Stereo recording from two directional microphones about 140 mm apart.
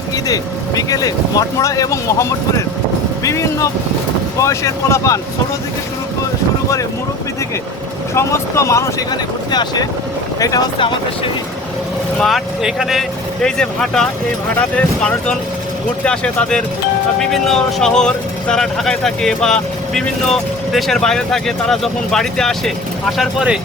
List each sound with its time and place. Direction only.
0.3 s speech: 25° left (ahead or behind)
8.1 s speech: 20° left (ahead or behind)
12.2 s speech: centre (ahead or behind)